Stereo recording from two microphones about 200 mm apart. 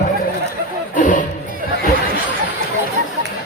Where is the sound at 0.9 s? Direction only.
40° left (ahead or behind).